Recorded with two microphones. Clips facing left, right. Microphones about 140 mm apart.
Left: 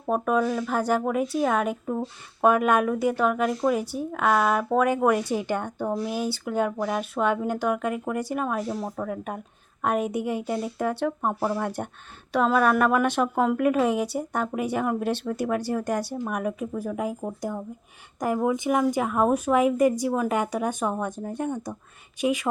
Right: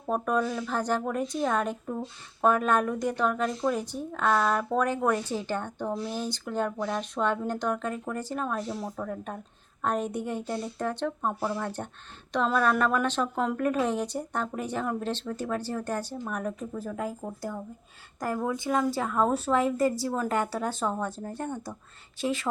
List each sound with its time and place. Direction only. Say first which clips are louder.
0.1 s speech: left 4 dB; 5° left (ahead or behind)